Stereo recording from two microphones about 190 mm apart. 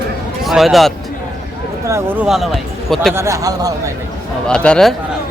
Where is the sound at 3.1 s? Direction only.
15° right (ahead or behind).